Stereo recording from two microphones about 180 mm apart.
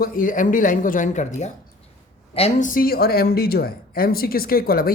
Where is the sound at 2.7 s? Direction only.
55° left (ahead or behind).